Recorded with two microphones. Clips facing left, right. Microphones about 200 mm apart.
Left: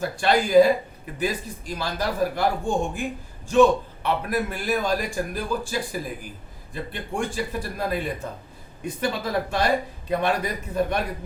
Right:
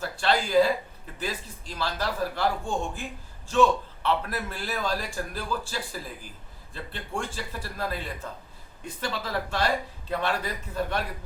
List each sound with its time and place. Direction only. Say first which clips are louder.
0.0 s a man's voice: left 4 dB; 15° left (ahead or behind)